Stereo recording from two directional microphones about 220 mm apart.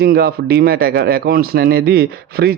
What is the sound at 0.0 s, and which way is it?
Speech, 45° right (ahead or behind).